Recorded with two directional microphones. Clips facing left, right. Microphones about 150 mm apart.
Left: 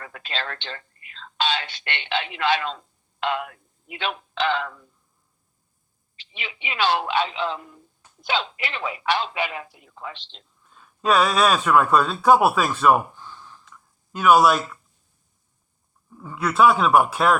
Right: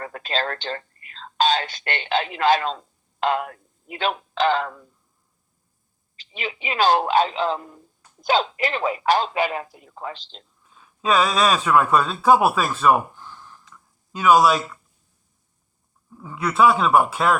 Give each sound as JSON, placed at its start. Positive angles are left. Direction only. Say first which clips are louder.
{"t": 0.0, "sound": "speech", "louder": "right 6 dB", "side_deg": -40}
{"t": 6.1, "sound": "speech", "louder": "right 7 dB", "side_deg": -40}
{"t": 10.6, "sound": "speech", "louder": "left 1 dB", "side_deg": -5}
{"t": 13.1, "sound": "a sound", "louder": "even", "side_deg": -10}
{"t": 13.7, "sound": "a sound", "louder": "even", "side_deg": 0}
{"t": 16.0, "sound": "speech", "louder": "even", "side_deg": 0}